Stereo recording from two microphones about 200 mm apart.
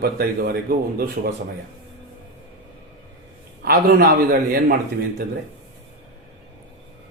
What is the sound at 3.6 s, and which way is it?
Speech, 50° right (ahead or behind).